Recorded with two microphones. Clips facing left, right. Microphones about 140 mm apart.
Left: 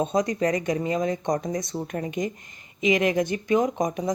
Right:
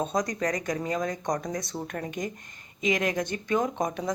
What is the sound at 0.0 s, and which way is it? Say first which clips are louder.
Speech: left 4 dB; centre (ahead or behind).